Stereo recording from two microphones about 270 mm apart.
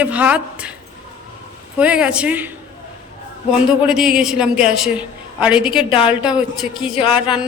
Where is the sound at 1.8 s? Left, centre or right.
Centre.